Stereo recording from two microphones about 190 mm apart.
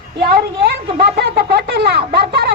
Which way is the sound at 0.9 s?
55° right (ahead or behind).